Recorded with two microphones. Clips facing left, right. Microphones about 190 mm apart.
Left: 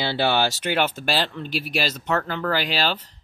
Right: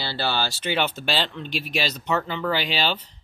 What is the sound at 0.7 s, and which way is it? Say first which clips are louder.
Speech: even; 10° left (ahead or behind).